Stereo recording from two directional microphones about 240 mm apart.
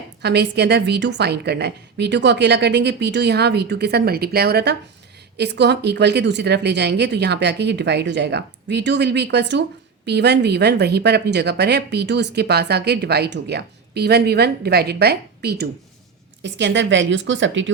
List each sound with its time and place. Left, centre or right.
0.2 s speech: right